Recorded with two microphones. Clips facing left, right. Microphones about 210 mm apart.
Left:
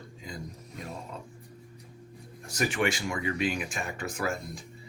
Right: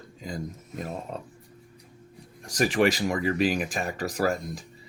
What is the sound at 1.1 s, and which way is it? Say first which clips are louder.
Speech: right 6 dB; 60° right (ahead or behind).